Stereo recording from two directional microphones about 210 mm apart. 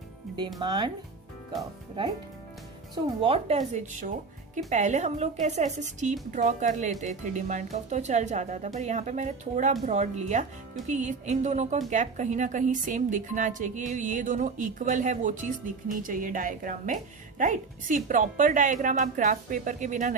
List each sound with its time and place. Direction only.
0.6 s speech: 20° right (ahead or behind)
2.9 s a woman's voice: 25° right (ahead or behind)